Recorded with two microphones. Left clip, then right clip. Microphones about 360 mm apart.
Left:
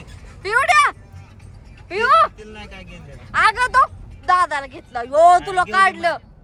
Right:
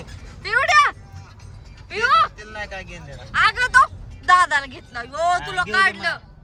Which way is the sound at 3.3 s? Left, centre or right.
Centre.